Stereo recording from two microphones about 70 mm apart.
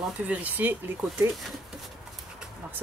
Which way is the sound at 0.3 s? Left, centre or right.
Right.